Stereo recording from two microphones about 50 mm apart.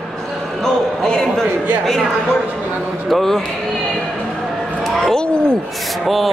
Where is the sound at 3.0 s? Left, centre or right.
Centre.